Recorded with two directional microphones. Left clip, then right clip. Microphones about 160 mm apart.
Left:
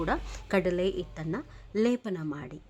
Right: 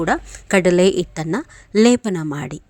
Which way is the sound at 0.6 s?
45° right (ahead or behind).